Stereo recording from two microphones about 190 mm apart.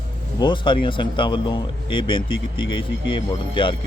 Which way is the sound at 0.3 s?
25° left (ahead or behind).